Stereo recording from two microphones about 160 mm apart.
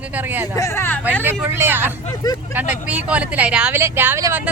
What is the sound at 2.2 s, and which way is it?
Speech, 25° left (ahead or behind).